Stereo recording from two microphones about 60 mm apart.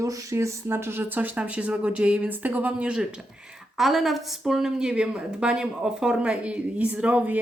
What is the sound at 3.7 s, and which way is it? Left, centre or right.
A woman's voice, centre.